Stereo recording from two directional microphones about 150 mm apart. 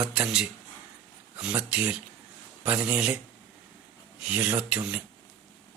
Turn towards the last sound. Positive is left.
turn(degrees=-10)  # may be behind; listen again after turning